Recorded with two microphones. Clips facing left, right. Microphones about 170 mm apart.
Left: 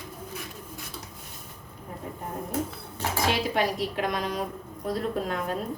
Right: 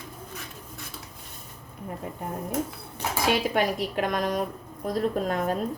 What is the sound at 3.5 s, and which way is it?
A woman's voice, 50° right (ahead or behind).